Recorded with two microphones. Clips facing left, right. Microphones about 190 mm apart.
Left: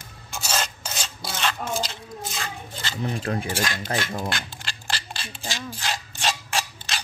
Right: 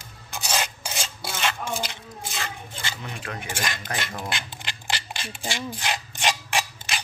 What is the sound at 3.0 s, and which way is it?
Speech, 35° left (ahead or behind).